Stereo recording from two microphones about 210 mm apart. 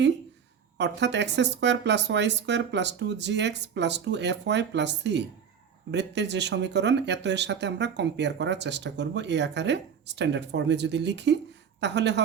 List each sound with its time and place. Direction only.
0.8 s speech: 55° right (ahead or behind)